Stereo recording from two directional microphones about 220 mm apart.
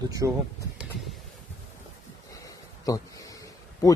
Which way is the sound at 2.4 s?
15° left (ahead or behind).